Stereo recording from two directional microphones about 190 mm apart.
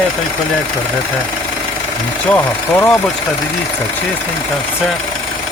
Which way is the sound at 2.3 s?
15° left (ahead or behind).